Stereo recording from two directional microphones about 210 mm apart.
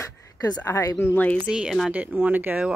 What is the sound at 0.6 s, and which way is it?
Speech, 15° left (ahead or behind).